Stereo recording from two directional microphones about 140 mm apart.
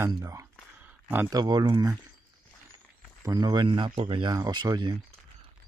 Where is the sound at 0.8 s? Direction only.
10° right (ahead or behind).